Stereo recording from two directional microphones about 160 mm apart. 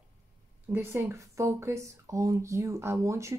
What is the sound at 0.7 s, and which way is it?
Speech, 10° right (ahead or behind).